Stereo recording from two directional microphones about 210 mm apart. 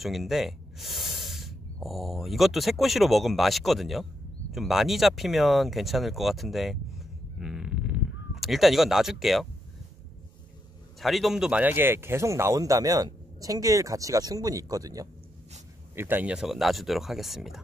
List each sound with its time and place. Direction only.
0.0 s speech: centre (ahead or behind)
11.0 s speech: centre (ahead or behind)